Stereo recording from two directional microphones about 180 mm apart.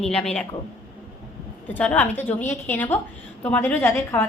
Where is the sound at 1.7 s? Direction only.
10° left (ahead or behind).